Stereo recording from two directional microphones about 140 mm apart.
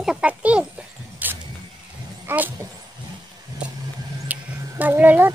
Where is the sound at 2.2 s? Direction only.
15° right (ahead or behind).